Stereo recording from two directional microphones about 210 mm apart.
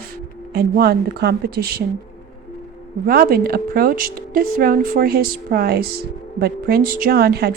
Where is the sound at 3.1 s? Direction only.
45° right (ahead or behind).